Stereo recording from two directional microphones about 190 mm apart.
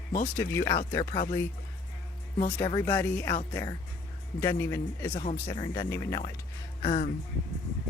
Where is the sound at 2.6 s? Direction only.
20° left (ahead or behind).